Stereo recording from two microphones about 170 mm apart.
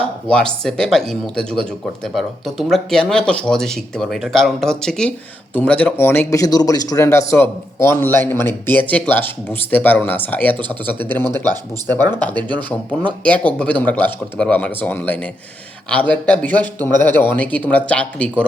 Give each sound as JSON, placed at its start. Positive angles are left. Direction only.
{"t": 0.3, "sound": "speech", "side_deg": 5}
{"t": 11.4, "sound": "speech", "side_deg": -20}
{"t": 12.1, "sound": "speech", "side_deg": 10}